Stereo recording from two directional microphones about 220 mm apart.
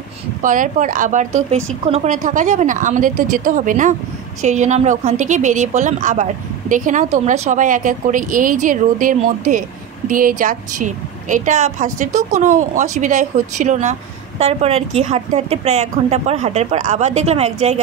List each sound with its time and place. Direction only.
0.4 s a woman's voice: 35° right (ahead or behind)